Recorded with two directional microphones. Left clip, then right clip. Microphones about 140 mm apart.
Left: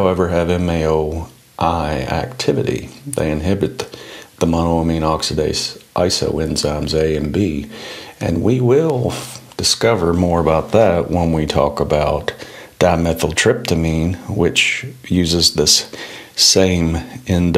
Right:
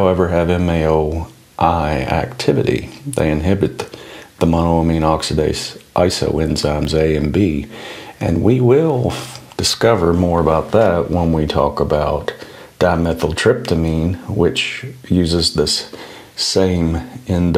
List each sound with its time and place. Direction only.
0.0 s speech: 5° right (ahead or behind); by 15.6 s 15° left (ahead or behind)
16.6 s speech: 10° left (ahead or behind)